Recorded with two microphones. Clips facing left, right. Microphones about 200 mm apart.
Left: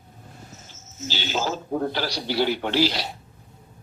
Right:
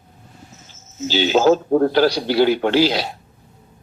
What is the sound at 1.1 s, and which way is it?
Speech, 90° right.